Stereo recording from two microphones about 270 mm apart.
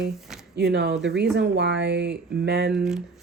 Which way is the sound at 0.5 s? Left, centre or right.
Right.